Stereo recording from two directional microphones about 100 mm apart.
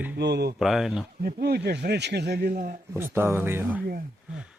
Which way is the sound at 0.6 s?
5° right (ahead or behind).